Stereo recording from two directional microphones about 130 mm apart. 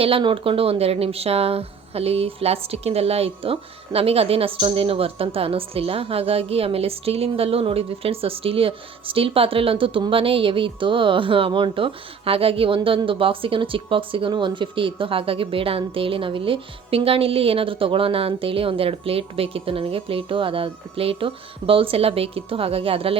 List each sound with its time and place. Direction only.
0.0 s speech: 40° right (ahead or behind)